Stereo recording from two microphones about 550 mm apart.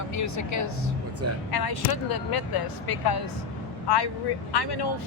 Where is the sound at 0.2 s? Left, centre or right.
Left.